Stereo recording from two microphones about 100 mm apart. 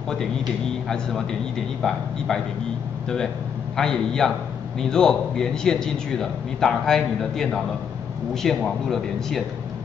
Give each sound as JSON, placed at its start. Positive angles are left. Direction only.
{"t": 1.8, "sound": "a man's voice", "side_deg": 0}
{"t": 3.7, "sound": "a man's voice", "side_deg": 5}